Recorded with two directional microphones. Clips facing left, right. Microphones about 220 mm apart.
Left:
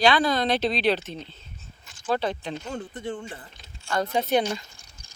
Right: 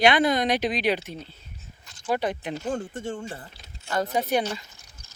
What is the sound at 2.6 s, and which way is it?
Speech, 50° right (ahead or behind).